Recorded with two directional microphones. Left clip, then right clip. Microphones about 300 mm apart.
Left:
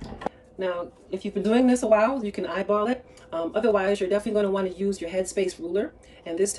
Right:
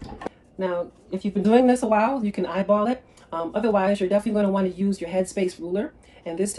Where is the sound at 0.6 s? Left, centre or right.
Centre.